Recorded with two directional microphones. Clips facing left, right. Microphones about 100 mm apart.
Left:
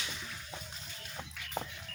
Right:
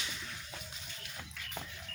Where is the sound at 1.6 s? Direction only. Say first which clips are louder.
Left 7 dB; 35° left (ahead or behind).